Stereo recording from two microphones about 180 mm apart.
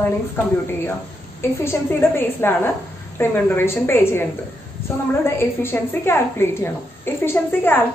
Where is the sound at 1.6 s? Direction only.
10° left (ahead or behind).